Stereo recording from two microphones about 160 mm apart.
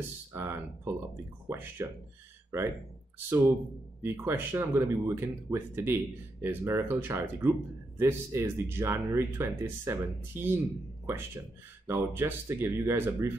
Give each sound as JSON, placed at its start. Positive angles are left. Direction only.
{"t": 0.3, "sound": "speech", "side_deg": -15}
{"t": 11.9, "sound": "speech", "side_deg": -15}